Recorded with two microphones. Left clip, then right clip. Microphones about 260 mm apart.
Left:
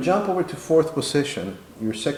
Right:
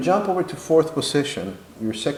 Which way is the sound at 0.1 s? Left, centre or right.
Centre.